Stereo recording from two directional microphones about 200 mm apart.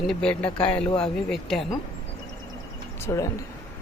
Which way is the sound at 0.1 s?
5° left (ahead or behind).